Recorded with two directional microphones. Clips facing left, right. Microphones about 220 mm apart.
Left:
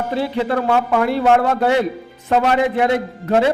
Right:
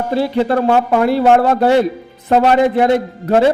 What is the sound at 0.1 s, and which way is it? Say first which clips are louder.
Speech: right 5 dB; 35° right (ahead or behind).